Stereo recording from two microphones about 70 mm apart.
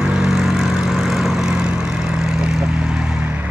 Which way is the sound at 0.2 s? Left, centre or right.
Centre.